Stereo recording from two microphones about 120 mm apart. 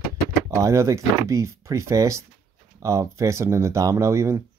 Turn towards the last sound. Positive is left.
turn(degrees=-25)  # may be behind; listen again after turning